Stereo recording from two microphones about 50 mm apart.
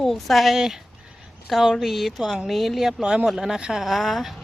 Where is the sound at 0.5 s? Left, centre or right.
Centre.